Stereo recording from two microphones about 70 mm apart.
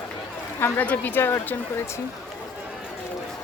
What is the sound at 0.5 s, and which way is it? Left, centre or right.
Speech, left.